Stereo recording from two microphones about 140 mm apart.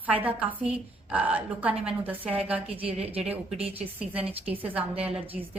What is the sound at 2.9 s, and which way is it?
Speech, 45° right (ahead or behind).